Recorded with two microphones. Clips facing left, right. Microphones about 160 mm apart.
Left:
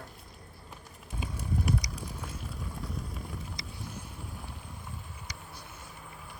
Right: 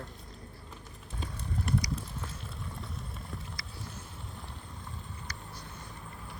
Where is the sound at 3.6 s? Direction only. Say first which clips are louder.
Left 3 dB; 20° left (ahead or behind).